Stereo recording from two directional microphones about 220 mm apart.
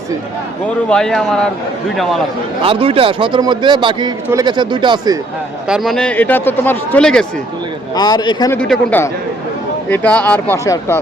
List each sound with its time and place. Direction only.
0.9 s speech: 5° left (ahead or behind)
2.6 s a man's voice: 25° right (ahead or behind)
5.6 s speech: centre (ahead or behind)
7.9 s a man's voice: 20° left (ahead or behind)
8.5 s speech: 5° left (ahead or behind)